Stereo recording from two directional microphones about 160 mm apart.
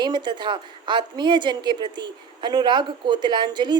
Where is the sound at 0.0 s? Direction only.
25° right (ahead or behind).